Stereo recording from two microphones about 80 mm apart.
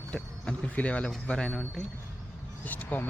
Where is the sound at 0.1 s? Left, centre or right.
Centre.